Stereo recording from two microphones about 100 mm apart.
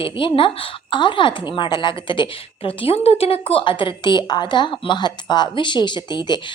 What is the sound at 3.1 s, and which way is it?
A woman's voice, 75° left (ahead or behind).